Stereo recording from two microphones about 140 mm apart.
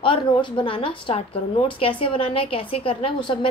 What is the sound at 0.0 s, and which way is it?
A woman's voice, 40° left (ahead or behind).